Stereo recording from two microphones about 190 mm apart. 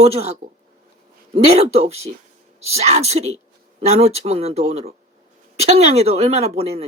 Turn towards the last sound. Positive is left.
turn(degrees=-35)  # may be behind; listen again after turning